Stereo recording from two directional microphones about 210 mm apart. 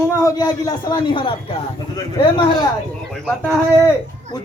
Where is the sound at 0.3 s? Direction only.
15° left (ahead or behind).